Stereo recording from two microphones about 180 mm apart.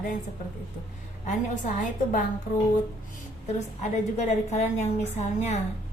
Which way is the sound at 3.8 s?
40° left (ahead or behind).